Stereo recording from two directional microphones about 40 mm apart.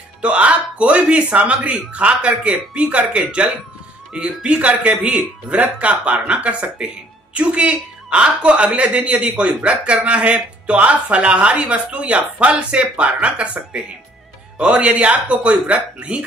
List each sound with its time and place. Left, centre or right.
0.2 s speech: right
9.1 s a man's voice: right
9.4 s speech: right
14.6 s speech: right